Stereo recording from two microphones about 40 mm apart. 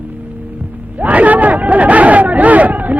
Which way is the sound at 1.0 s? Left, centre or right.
Right.